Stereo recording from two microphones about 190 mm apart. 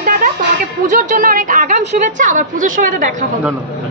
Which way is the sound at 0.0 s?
45° right (ahead or behind).